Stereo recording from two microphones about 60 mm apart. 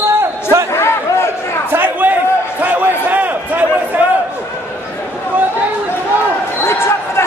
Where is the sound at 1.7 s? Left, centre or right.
Right.